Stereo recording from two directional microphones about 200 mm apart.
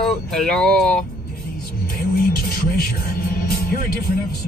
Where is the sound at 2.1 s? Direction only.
50° left (ahead or behind).